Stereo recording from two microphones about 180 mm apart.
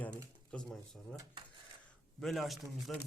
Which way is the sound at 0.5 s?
5° left (ahead or behind).